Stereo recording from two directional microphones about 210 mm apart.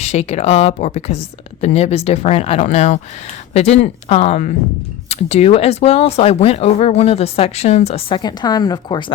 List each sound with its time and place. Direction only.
0.0 s speech: 30° left (ahead or behind)